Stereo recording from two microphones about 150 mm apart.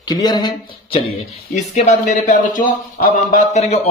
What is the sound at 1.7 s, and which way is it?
Speech, 55° left (ahead or behind).